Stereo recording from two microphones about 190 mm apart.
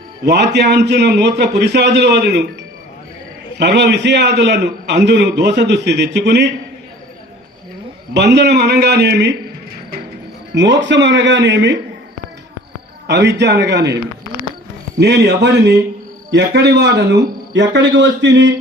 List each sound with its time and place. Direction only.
0.3 s a man's voice: 65° right (ahead or behind)
3.6 s a man's voice: 65° right (ahead or behind)
8.1 s a man's voice: 65° right (ahead or behind)
10.5 s speech: 70° right (ahead or behind)
13.1 s a man's voice: 65° right (ahead or behind)